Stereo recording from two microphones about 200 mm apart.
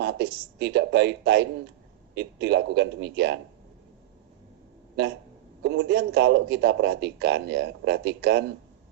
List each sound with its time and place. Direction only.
0.0 s a man's voice: 60° right (ahead or behind)
5.6 s a man's voice: 60° right (ahead or behind)